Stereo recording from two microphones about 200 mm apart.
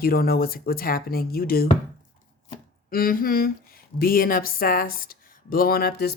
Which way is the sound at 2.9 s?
45° left (ahead or behind).